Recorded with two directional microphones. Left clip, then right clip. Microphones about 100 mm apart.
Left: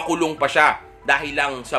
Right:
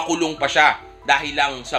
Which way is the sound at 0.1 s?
45° left (ahead or behind).